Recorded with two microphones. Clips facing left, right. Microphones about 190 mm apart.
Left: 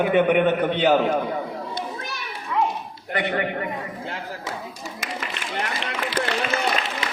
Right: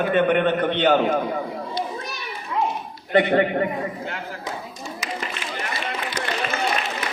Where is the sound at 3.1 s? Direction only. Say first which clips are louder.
Right 7 dB; 30° right (ahead or behind).